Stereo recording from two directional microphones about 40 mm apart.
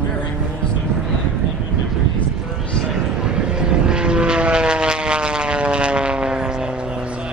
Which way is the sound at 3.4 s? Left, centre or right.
Right.